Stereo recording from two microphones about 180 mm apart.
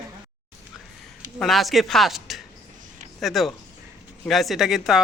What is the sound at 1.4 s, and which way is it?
Speech, centre (ahead or behind).